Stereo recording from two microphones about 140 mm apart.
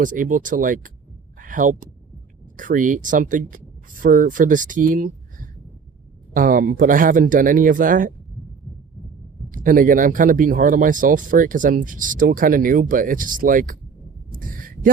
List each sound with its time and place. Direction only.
0.0 s speech: 70° right (ahead or behind)
6.3 s speech: 80° right
9.5 s speech: 75° right (ahead or behind)
14.3 s a sound: 80° right